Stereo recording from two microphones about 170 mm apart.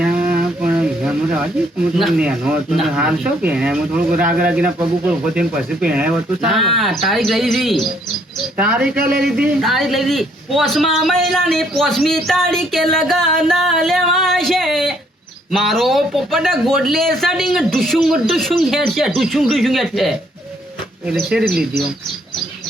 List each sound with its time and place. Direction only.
0.3 s a sound: 10° right (ahead or behind)
2.0 s a man's voice: 5° right (ahead or behind)
9.0 s speech: 65° right (ahead or behind)
9.5 s a man's voice: centre (ahead or behind)